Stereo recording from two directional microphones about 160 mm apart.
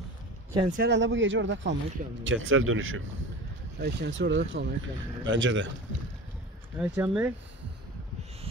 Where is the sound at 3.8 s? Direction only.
90° right.